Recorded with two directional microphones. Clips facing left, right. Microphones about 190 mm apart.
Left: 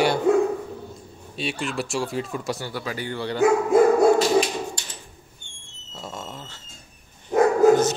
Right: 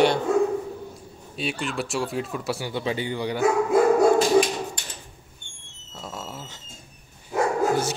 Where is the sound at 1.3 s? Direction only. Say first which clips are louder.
Left 1 dB; centre (ahead or behind).